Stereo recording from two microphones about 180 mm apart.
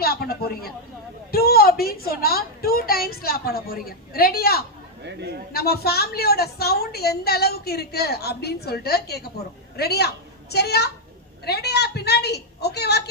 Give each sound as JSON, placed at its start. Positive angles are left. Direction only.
{"t": 0.0, "sound": "a woman's voice", "side_deg": 60}
{"t": 5.0, "sound": "speech", "side_deg": -65}
{"t": 5.5, "sound": "a woman's voice", "side_deg": 60}